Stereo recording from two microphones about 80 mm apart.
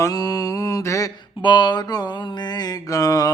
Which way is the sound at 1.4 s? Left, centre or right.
Left.